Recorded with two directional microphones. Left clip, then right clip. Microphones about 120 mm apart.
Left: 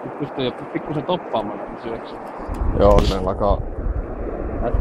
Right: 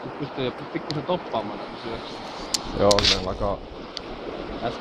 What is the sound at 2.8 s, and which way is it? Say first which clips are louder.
Speech: left 5 dB; 30° left (ahead or behind).